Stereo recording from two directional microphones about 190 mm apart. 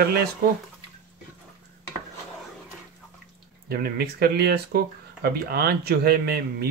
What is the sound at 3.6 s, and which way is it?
Speech, 50° right (ahead or behind).